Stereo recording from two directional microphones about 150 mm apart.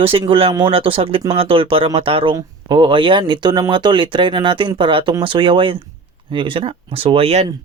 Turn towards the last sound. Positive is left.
turn(degrees=-45)  # may be behind; listen again after turning